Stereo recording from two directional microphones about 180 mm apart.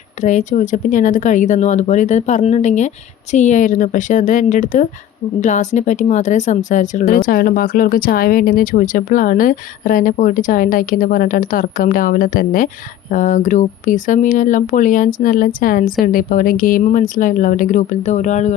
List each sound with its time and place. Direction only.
0.2 s speech: 40° left (ahead or behind)